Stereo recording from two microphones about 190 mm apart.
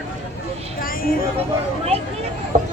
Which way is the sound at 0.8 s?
50° left (ahead or behind).